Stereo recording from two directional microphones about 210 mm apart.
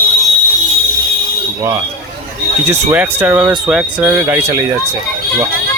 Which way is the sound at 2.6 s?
10° right (ahead or behind).